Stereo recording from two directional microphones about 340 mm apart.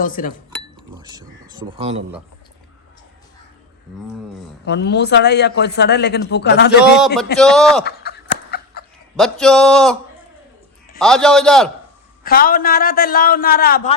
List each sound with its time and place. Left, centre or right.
0.0 s speech: left
0.9 s speech: centre
4.6 s speech: left
7.3 s speech: centre
7.9 s a sound: left
9.1 s speech: centre
11.0 s speech: centre
12.2 s speech: left